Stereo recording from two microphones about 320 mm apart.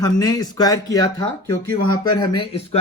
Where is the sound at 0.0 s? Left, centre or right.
Centre.